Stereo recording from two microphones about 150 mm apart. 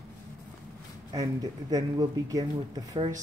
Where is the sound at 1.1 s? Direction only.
25° right (ahead or behind).